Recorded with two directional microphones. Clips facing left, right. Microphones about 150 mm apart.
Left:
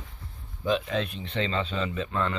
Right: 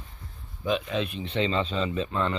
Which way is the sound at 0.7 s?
15° right (ahead or behind).